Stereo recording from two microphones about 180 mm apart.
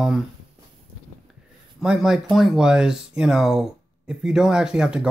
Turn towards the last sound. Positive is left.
turn(degrees=-5)  # may be behind; listen again after turning